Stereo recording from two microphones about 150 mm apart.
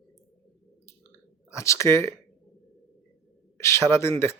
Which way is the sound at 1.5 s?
20° left (ahead or behind).